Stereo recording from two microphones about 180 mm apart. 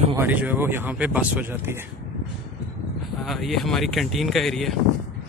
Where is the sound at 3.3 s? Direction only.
Centre (ahead or behind).